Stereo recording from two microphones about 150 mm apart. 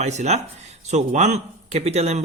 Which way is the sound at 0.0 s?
50° right (ahead or behind).